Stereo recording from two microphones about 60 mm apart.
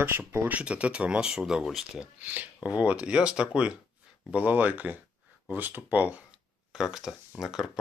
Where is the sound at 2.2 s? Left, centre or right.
Right; by 3.8 s centre.